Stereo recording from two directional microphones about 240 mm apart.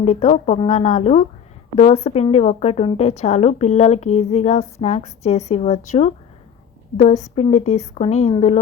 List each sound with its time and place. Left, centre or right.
0.0 s a woman's voice: left